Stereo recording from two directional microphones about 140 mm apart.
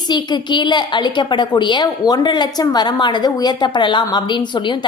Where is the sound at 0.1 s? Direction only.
30° left (ahead or behind).